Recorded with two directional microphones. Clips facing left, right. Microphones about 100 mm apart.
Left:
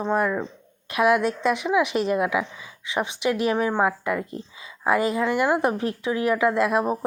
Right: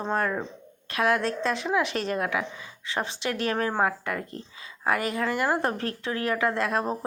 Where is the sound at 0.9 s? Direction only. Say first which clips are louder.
Left 4 dB; 15° left (ahead or behind).